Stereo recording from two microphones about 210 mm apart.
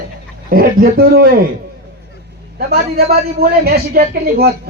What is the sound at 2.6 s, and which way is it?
A man's voice, 50° right (ahead or behind).